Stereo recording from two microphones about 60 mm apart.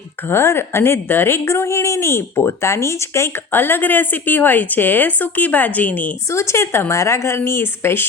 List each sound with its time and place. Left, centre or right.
0.3 s a woman's voice: left
1.5 s a woman's voice: left
3.5 s a woman's voice: left
6.3 s a woman's voice: left